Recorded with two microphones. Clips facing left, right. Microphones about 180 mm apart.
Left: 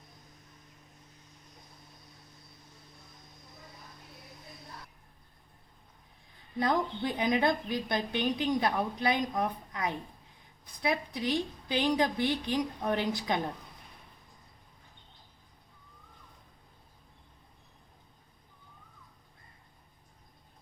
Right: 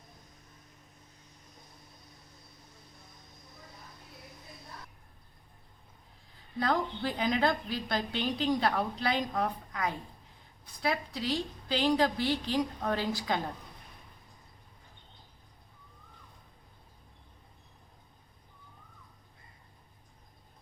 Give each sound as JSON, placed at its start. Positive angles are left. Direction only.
{"t": 6.6, "sound": "a woman's voice", "side_deg": 20}